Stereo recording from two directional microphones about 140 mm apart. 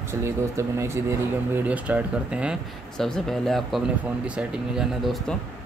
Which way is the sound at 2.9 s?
5° left (ahead or behind).